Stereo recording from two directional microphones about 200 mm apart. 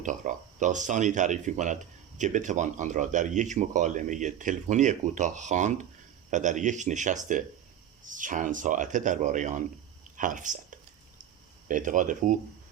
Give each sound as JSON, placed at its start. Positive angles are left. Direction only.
{"t": 0.0, "sound": "speech", "side_deg": -40}